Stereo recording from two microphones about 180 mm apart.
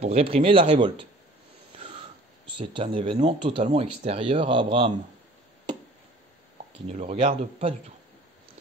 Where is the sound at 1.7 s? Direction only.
30° right (ahead or behind).